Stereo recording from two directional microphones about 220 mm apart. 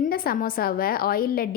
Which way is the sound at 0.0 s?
40° left (ahead or behind).